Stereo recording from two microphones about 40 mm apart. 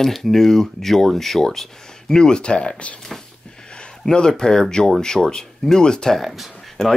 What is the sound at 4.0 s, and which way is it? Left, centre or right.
Speech, centre.